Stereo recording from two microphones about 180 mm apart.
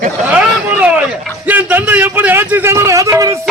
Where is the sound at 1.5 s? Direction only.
10° right (ahead or behind).